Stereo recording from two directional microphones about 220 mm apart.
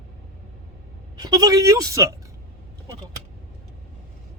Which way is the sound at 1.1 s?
15° right (ahead or behind).